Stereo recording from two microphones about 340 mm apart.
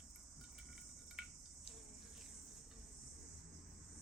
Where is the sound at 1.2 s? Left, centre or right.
Centre.